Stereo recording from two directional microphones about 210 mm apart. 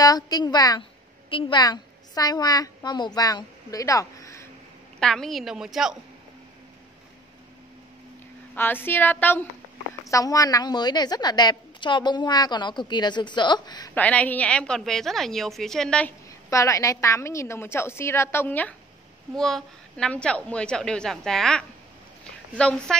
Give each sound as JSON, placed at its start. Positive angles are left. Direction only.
{"t": 0.0, "sound": "a woman's voice", "side_deg": 20}
{"t": 5.0, "sound": "a woman's voice", "side_deg": 0}
{"t": 8.5, "sound": "a woman's voice", "side_deg": 10}
{"t": 13.9, "sound": "a woman's voice", "side_deg": 5}